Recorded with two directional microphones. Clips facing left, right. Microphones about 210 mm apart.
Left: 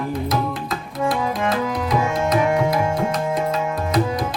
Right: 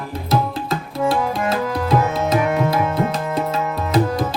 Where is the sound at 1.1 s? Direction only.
25° right (ahead or behind).